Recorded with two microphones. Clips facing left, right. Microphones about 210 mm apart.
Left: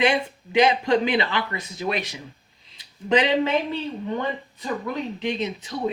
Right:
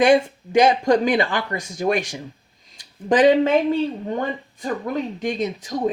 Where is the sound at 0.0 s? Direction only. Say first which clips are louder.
Right 6 dB; 45° right (ahead or behind).